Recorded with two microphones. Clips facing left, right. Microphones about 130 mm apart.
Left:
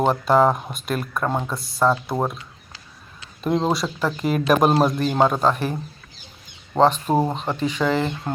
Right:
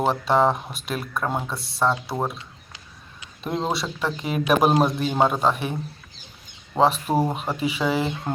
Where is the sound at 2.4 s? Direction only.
20° right (ahead or behind).